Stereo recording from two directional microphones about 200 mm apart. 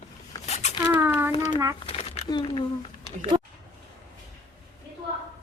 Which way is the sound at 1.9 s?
30° left (ahead or behind).